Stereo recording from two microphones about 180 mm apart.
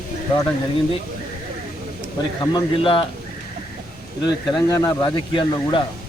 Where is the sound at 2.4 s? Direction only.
20° left (ahead or behind).